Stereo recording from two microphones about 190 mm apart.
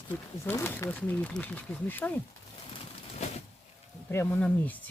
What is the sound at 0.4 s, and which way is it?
Speech, 10° left (ahead or behind).